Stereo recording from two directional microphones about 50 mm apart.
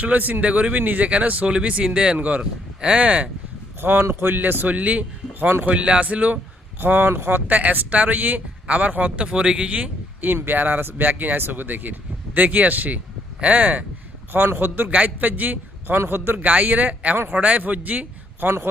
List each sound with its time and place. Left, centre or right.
0.0 s speech: right
3.8 s speech: right
4.7 s a man's voice: right
6.7 s speech: right
7.3 s speech: right
9.2 s speech: centre
10.3 s speech: right
14.3 s speech: right
14.8 s speech: right
16.5 s a man's voice: right